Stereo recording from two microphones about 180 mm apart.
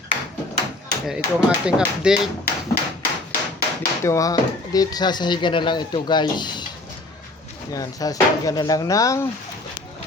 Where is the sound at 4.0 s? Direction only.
15° left (ahead or behind).